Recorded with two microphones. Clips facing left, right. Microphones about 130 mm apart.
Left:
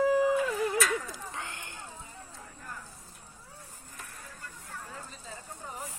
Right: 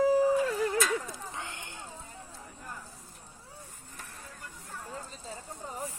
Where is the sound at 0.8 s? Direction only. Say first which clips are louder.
Even; 25° right (ahead or behind).